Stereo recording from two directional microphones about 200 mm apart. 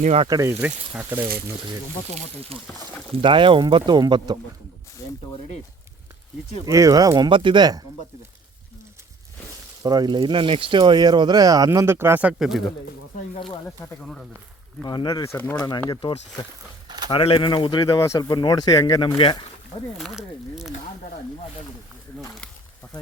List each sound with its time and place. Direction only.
0.0 s speech: 35° right (ahead or behind)
0.3 s speech: 15° right (ahead or behind)
3.2 s speech: 25° right (ahead or behind)
6.7 s speech: 15° right (ahead or behind)
9.8 s speech: 20° right (ahead or behind); by 12.6 s centre (ahead or behind)
13.7 s speech: 10° left (ahead or behind)
14.8 s speech: 20° left (ahead or behind)
20.0 s speech: centre (ahead or behind)